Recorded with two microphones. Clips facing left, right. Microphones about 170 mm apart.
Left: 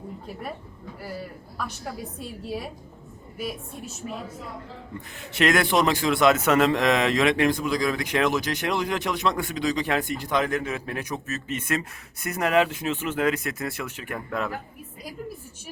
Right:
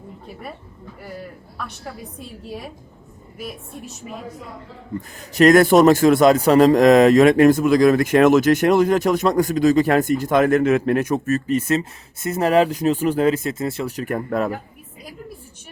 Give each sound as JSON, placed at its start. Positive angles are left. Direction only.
{"t": 1.0, "sound": "a man's voice", "side_deg": 5}
{"t": 3.4, "sound": "a man's voice", "side_deg": 0}
{"t": 4.9, "sound": "a man's voice", "side_deg": -40}
{"t": 11.4, "sound": "speech", "side_deg": -30}
{"t": 13.9, "sound": "speech", "side_deg": -45}